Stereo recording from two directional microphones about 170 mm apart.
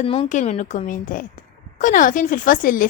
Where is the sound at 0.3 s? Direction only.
45° left (ahead or behind).